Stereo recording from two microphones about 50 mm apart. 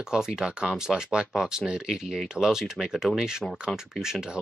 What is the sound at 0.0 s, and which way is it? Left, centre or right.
Speech, centre.